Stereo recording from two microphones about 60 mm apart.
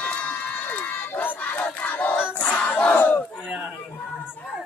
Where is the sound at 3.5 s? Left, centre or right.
Centre.